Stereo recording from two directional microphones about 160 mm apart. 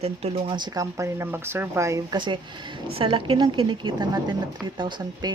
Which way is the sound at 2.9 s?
35° right (ahead or behind).